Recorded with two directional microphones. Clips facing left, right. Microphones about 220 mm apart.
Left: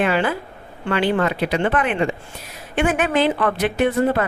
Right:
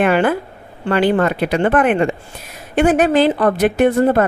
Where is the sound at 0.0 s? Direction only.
55° right (ahead or behind).